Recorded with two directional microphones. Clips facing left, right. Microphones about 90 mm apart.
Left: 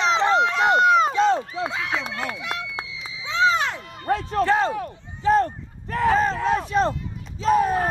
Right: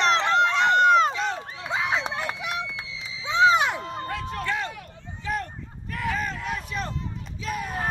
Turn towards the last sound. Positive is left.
turn(degrees=30)  # may be behind; listen again after turning